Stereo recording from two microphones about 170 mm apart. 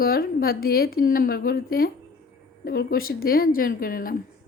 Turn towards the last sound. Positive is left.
turn(degrees=55)  # may be behind; listen again after turning